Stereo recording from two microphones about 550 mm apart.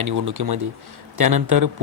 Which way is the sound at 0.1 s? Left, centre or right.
Right.